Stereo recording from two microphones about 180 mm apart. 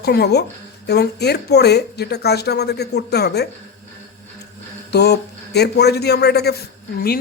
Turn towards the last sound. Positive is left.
turn(degrees=55)  # may be behind; listen again after turning